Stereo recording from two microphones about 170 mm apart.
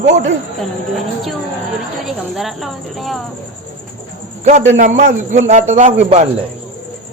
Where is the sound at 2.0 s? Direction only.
Centre (ahead or behind).